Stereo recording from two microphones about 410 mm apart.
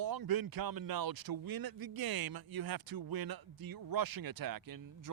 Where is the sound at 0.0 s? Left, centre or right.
Right.